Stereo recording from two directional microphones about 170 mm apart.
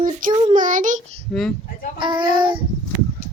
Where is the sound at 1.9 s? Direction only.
25° right (ahead or behind).